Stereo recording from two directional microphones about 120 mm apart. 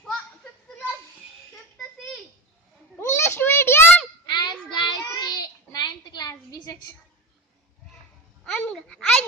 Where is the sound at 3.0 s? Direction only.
20° left (ahead or behind).